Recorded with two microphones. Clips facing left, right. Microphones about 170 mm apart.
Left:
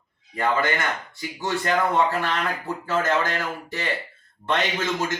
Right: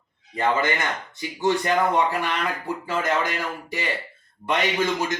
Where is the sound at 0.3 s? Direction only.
20° right (ahead or behind).